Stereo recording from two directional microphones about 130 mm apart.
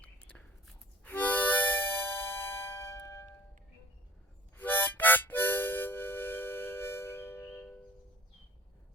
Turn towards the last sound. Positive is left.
turn(degrees=20)  # may be behind; listen again after turning